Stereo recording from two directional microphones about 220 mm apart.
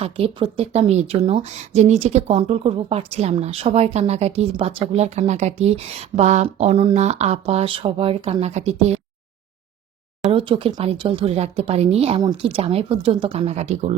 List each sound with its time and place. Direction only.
0.0 s speech: 25° right (ahead or behind)
10.3 s speech: 25° right (ahead or behind)